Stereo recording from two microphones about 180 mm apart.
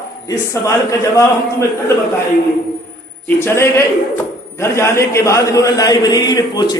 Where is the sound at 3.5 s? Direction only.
15° left (ahead or behind).